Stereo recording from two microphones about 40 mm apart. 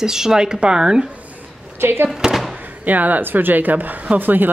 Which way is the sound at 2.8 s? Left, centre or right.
Right.